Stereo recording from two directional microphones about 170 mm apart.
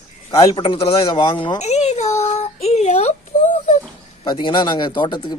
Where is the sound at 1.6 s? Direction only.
40° left (ahead or behind).